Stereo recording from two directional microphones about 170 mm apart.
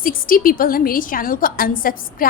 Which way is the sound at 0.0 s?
55° left (ahead or behind).